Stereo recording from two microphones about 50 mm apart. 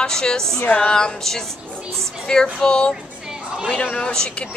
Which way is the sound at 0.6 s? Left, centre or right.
Left.